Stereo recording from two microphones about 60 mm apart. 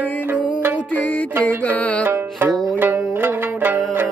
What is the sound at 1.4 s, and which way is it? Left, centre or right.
Music, left.